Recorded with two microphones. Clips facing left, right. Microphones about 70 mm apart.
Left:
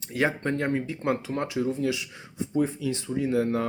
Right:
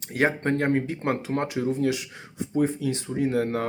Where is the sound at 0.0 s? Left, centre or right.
Right.